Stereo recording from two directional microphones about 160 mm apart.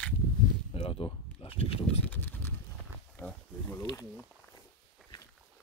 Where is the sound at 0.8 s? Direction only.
35° left (ahead or behind).